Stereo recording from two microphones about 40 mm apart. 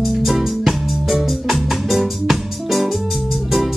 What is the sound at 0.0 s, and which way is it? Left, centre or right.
Music, centre.